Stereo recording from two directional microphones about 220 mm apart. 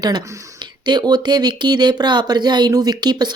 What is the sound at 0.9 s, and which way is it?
Speech, 20° right (ahead or behind).